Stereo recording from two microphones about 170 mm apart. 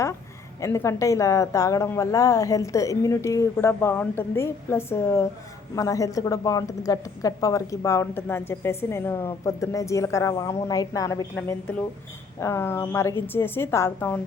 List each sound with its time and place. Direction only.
0.6 s a woman's voice: 15° left (ahead or behind)